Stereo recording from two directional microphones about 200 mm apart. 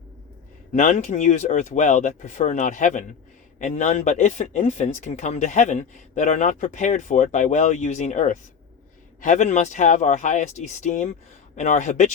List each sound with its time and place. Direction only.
0.7 s speech: 35° left (ahead or behind)